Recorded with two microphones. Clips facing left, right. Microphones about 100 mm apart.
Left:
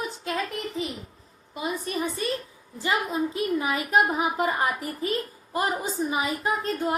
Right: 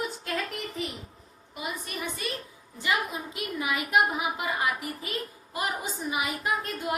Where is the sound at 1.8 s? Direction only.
35° left (ahead or behind).